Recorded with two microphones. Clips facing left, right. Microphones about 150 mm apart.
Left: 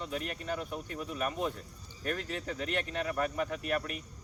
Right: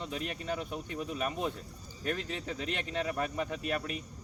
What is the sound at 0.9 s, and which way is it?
Speech, 25° right (ahead or behind).